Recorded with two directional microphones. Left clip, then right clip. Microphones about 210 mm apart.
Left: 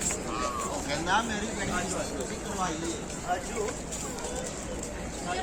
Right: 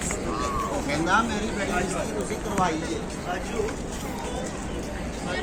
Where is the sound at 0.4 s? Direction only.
45° right (ahead or behind).